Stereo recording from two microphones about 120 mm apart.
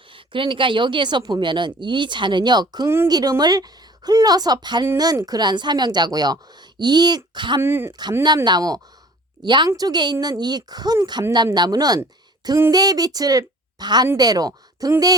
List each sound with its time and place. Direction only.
0.1 s a woman's voice: 45° right (ahead or behind)
7.6 s speech: 20° right (ahead or behind)
8.4 s a woman's voice: 35° right (ahead or behind)